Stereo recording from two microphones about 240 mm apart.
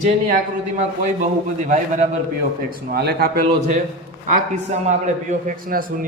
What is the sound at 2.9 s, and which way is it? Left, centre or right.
A man's voice, right.